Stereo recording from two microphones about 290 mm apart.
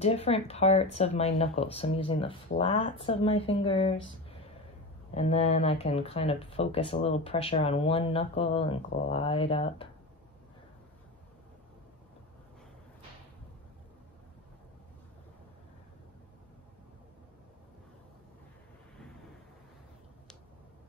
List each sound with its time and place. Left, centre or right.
0.0 s speech: left
5.1 s speech: left